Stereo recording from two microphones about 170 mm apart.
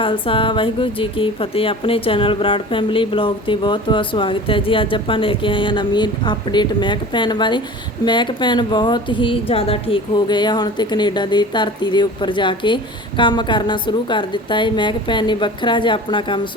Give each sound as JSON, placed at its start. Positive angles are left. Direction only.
{"t": 0.0, "sound": "a woman's voice", "side_deg": 30}